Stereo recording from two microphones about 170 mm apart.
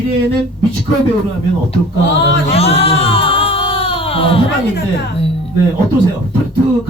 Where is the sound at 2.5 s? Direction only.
35° left (ahead or behind).